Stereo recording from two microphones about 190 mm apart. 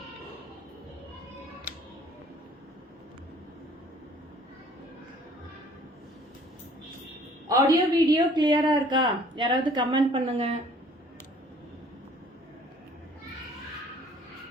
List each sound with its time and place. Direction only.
7.4 s a woman's voice: 20° right (ahead or behind)